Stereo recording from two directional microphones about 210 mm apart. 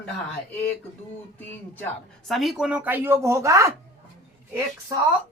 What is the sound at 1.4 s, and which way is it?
Speech, 10° left (ahead or behind).